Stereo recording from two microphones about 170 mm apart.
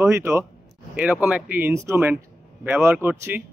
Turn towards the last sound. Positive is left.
turn(degrees=-10)  # may be behind; listen again after turning